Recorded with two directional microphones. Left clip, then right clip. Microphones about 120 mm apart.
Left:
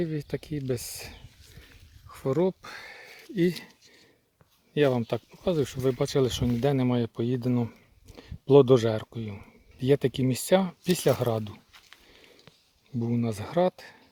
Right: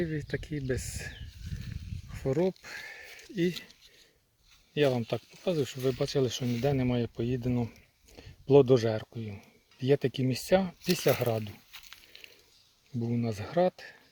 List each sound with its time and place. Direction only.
0.0 s speech: 35° left (ahead or behind)
4.7 s speech: 45° left (ahead or behind)
11.7 s a sound: 10° right (ahead or behind)
13.0 s speech: 40° left (ahead or behind)